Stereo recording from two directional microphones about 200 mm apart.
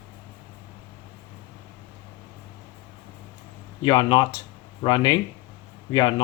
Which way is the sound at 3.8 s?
20° left (ahead or behind).